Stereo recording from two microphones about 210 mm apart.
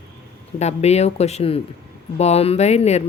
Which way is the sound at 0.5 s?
30° left (ahead or behind).